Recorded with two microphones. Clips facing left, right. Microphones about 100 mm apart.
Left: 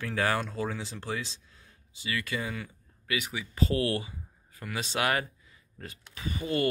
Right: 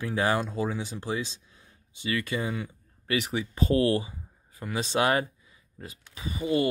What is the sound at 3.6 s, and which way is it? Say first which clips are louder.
Speech: right 6 dB; 25° right (ahead or behind).